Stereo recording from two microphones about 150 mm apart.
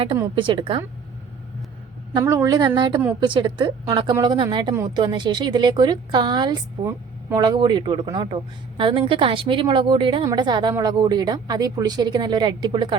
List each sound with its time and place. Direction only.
0.3 s a woman's voice: 35° right (ahead or behind)
2.1 s a woman's voice: 20° right (ahead or behind)